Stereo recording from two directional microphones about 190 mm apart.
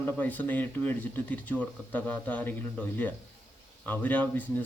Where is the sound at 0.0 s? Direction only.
10° left (ahead or behind).